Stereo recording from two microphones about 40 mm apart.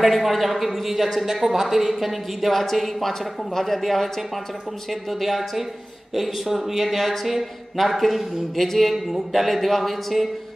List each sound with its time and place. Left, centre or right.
0.0 s speech: centre
6.1 s speech: centre